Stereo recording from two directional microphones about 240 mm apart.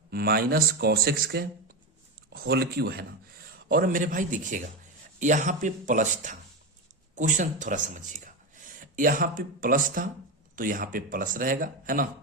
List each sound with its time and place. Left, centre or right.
0.1 s speech: right